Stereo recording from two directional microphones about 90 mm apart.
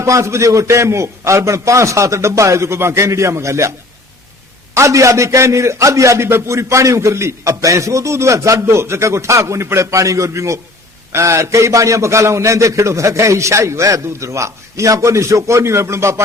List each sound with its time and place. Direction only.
0.0 s a man's voice: 35° right (ahead or behind)
4.7 s a man's voice: 35° right (ahead or behind)